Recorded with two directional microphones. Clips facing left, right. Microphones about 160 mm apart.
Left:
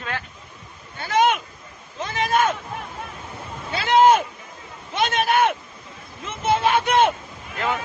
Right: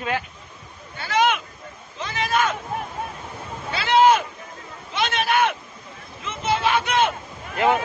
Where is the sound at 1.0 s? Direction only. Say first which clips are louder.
Left 1 dB; 45° left (ahead or behind).